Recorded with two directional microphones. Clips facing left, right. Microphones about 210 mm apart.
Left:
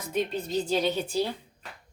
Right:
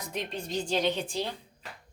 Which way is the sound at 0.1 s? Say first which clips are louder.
Left 6 dB; 5° left (ahead or behind).